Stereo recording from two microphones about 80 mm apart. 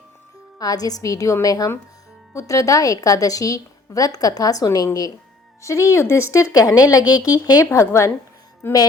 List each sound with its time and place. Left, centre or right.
0.6 s a woman's voice: left
7.7 s speech: left
8.6 s music: left